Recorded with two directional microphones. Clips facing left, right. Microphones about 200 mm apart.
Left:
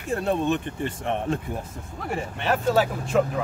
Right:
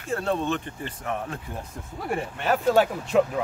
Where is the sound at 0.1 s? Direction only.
15° left (ahead or behind).